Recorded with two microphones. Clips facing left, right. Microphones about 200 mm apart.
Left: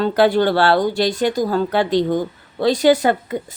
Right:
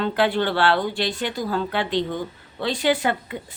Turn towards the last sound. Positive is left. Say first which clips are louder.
# left 7 dB
turn(degrees=40)  # may be behind; listen again after turning